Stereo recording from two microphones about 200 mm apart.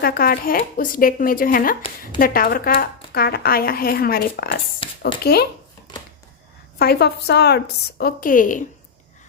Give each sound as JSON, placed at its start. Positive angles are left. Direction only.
{"t": 0.0, "sound": "speech", "side_deg": 50}
{"t": 4.8, "sound": "a sound", "side_deg": 25}
{"t": 5.2, "sound": "speech", "side_deg": 50}
{"t": 6.7, "sound": "speech", "side_deg": 55}